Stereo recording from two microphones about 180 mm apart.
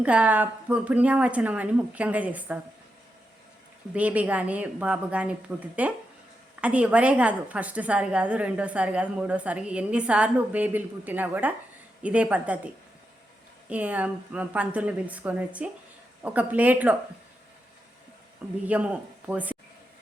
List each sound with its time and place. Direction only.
0.0 s a woman's voice: 5° right (ahead or behind)
3.9 s a woman's voice: 10° right (ahead or behind)
13.7 s a woman's voice: 10° right (ahead or behind)
18.6 s speech: 10° right (ahead or behind)